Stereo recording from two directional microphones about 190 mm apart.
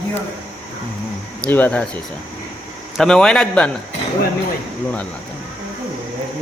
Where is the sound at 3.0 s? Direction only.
5° left (ahead or behind).